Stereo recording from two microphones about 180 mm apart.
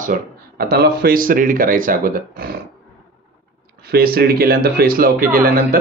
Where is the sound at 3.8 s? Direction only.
60° right (ahead or behind).